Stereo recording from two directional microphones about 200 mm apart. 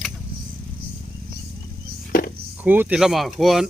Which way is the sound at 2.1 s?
45° left (ahead or behind).